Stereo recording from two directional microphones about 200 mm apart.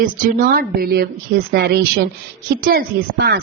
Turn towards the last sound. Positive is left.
turn(degrees=-50)  # may be behind; listen again after turning